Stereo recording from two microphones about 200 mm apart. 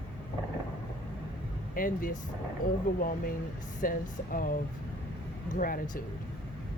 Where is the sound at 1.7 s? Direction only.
45° left (ahead or behind).